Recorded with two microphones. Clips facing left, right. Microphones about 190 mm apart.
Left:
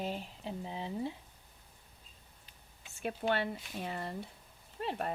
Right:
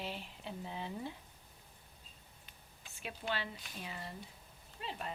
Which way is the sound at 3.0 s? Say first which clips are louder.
Left 8 dB; 55° left (ahead or behind).